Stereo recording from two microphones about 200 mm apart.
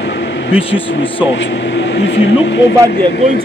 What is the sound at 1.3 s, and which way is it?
Speech, 60° left (ahead or behind).